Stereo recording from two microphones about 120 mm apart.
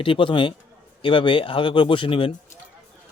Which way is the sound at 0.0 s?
45° left (ahead or behind).